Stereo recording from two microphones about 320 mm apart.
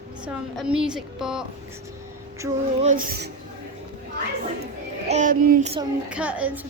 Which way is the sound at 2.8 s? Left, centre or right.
Right.